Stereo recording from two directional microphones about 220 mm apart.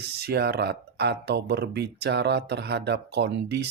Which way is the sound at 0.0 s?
45° right (ahead or behind).